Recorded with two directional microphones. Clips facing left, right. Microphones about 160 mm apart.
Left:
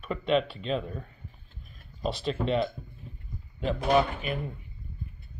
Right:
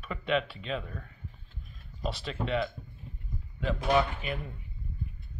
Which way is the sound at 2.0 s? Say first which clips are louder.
Left 5 dB; 30° left (ahead or behind).